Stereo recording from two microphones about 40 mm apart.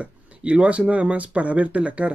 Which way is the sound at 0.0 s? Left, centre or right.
Right.